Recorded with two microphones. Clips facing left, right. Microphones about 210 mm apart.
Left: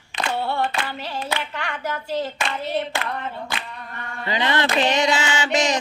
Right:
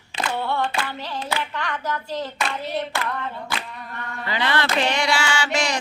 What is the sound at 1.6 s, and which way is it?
Hands, 10° left (ahead or behind).